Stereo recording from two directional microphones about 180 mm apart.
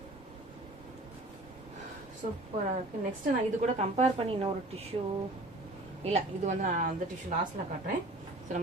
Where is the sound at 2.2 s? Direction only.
45° right (ahead or behind).